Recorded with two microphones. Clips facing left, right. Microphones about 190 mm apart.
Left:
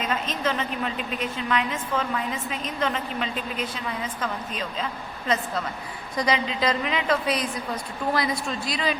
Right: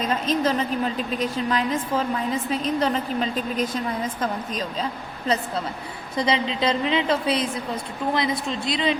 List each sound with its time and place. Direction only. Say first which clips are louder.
0.0 s a woman's voice: right 5 dB; 35° right (ahead or behind)
6.1 s a woman's voice: right 2 dB; 30° right (ahead or behind)